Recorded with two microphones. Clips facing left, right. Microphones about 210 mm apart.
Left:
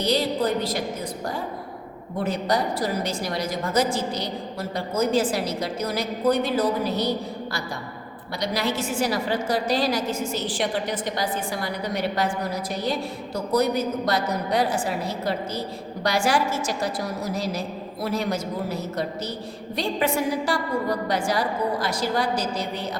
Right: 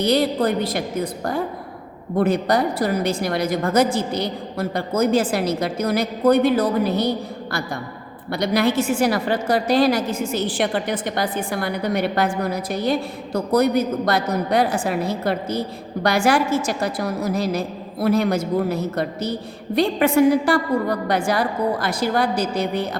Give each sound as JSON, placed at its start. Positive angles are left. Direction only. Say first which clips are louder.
{"t": 0.0, "sound": "a woman's voice", "louder": "right 4 dB", "side_deg": -60}
{"t": 2.1, "sound": "a woman's voice", "louder": "right 6 dB", "side_deg": -60}
{"t": 8.3, "sound": "a woman's voice", "louder": "right 7 dB", "side_deg": -60}
{"t": 18.0, "sound": "a woman's voice", "louder": "right 7 dB", "side_deg": -55}